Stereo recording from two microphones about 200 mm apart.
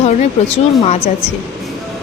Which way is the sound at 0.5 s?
30° left (ahead or behind).